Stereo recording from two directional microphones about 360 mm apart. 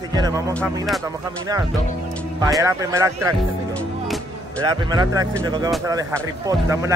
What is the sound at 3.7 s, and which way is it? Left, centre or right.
Music, centre.